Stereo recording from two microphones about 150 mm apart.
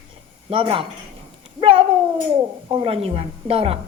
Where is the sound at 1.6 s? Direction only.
35° right (ahead or behind).